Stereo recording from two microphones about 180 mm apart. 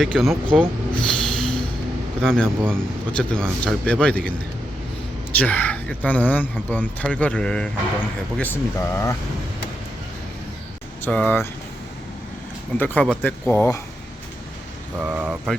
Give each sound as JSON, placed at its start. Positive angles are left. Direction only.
{"t": 0.0, "sound": "speech", "side_deg": 0}
{"t": 0.9, "sound": "a sound", "side_deg": 5}
{"t": 2.2, "sound": "speech", "side_deg": 5}
{"t": 5.4, "sound": "speech", "side_deg": 10}
{"t": 11.0, "sound": "speech", "side_deg": 10}
{"t": 12.7, "sound": "speech", "side_deg": 10}
{"t": 14.9, "sound": "speech", "side_deg": -10}